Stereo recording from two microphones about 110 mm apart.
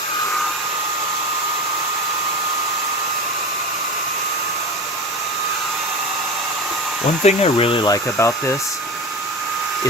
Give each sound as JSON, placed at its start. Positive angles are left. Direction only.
{"t": 7.3, "sound": "speech", "side_deg": 65}
{"t": 7.9, "sound": "speech", "side_deg": 30}